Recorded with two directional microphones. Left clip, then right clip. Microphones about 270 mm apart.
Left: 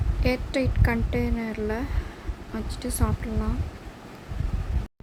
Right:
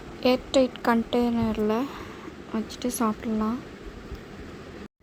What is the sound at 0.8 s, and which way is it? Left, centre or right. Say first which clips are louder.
A child's voice: right 4 dB; centre.